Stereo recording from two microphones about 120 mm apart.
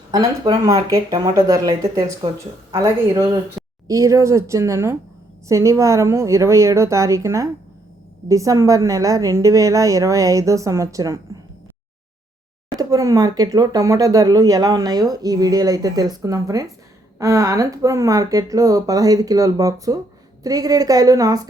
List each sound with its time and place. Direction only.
0.1 s a woman's voice: 30° right (ahead or behind)
12.7 s a woman's voice: 30° right (ahead or behind)